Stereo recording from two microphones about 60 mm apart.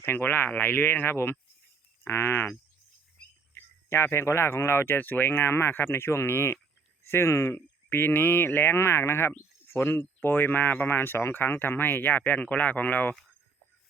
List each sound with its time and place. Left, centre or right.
0.0 s speech: left
3.5 s speech: left
4.9 s speech: left
7.5 s speech: left